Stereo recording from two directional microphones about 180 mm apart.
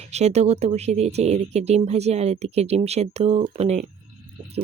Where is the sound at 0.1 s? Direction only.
40° right (ahead or behind).